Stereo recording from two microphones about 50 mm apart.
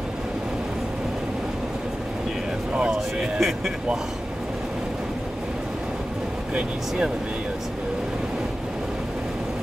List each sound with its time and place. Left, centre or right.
2.7 s speech: centre
3.3 s speech: centre